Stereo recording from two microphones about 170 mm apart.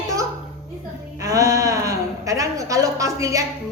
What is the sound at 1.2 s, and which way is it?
A woman's voice, 20° right (ahead or behind).